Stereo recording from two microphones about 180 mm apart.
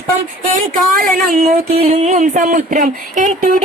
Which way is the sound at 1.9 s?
40° right (ahead or behind).